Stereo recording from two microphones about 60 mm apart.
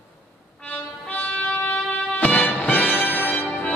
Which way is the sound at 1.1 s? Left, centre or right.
Left.